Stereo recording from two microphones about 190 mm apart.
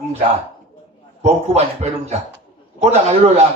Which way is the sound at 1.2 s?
35° right (ahead or behind).